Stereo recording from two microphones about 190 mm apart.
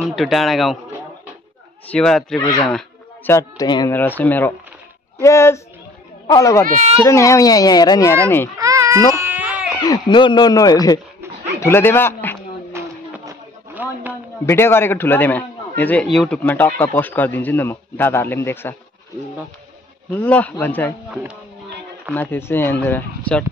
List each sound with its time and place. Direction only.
0.0 s a man's voice: centre (ahead or behind)
1.9 s a man's voice: 5° left (ahead or behind)
3.3 s speech: 15° left (ahead or behind)
4.2 s a man's voice: 10° left (ahead or behind)
8.5 s baby cry: 15° right (ahead or behind)
9.8 s speech: 25° left (ahead or behind)
12.7 s a sound: 15° right (ahead or behind)
14.4 s a man's voice: 15° left (ahead or behind)
20.2 s a man's voice: 5° left (ahead or behind)
22.1 s a man's voice: 10° left (ahead or behind)